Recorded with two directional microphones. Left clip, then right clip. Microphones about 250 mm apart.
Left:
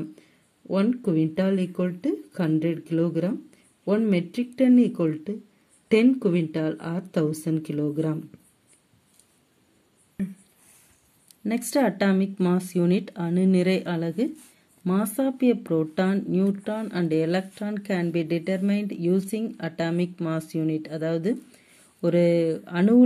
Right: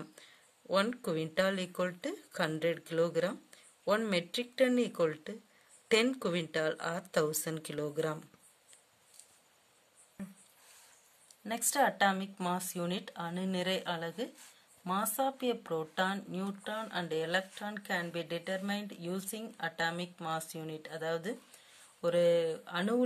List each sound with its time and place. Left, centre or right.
0.7 s speech: centre
11.4 s speech: centre